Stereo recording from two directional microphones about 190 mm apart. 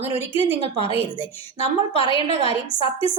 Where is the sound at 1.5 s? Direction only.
30° left (ahead or behind).